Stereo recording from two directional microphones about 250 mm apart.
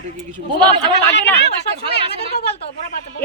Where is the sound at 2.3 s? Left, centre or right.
Left.